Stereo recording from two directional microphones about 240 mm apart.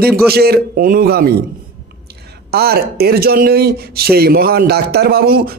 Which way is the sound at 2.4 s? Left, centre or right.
Right.